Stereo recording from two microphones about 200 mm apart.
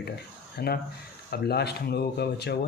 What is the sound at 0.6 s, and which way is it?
Speech, 50° left (ahead or behind).